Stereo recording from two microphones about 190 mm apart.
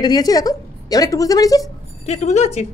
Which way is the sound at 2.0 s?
35° left (ahead or behind).